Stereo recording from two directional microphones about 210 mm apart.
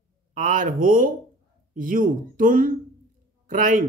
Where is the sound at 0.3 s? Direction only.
40° right (ahead or behind).